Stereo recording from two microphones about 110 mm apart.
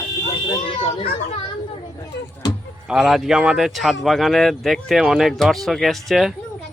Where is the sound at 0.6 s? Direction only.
55° left (ahead or behind).